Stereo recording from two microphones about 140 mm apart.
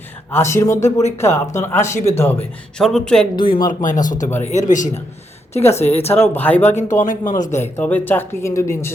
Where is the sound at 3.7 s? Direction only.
65° left (ahead or behind).